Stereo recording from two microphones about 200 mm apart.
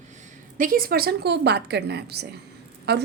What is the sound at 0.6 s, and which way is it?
A woman's voice, 45° right (ahead or behind).